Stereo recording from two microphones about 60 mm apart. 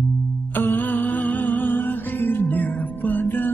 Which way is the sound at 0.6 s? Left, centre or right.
Left.